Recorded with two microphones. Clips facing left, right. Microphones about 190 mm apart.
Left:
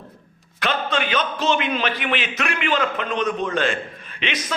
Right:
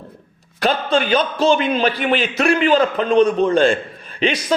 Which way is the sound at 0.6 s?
35° right (ahead or behind).